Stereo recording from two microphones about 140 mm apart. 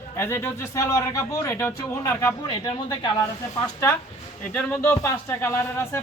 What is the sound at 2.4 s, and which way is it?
Speech, 30° left (ahead or behind).